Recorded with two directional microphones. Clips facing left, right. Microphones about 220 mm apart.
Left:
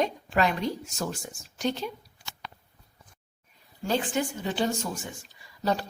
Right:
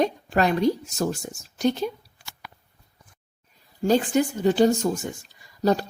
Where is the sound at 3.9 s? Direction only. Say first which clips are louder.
Right 7 dB; 40° right (ahead or behind).